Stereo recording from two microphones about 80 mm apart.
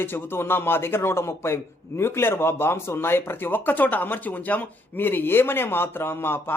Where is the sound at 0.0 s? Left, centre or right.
Left.